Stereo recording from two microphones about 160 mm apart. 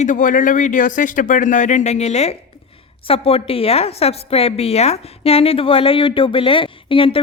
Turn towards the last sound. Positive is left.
turn(degrees=35)  # may be behind; listen again after turning